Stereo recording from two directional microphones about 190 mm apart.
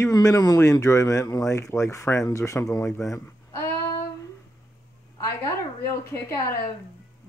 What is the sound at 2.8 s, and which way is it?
Speech, centre (ahead or behind).